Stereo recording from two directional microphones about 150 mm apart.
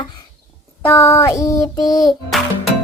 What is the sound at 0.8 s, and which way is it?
Child singing, 15° left (ahead or behind).